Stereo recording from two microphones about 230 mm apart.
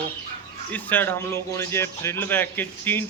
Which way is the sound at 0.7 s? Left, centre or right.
Centre.